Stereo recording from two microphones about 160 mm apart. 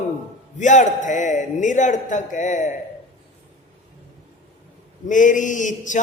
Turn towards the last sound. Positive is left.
turn(degrees=50)  # may be behind; listen again after turning